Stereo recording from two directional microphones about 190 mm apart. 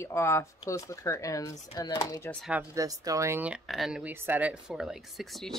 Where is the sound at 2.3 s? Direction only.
5° right (ahead or behind).